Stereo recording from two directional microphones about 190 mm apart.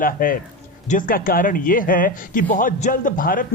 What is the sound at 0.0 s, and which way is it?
A man's voice, 50° left (ahead or behind).